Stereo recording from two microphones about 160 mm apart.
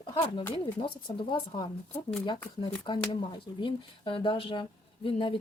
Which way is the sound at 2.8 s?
30° left (ahead or behind).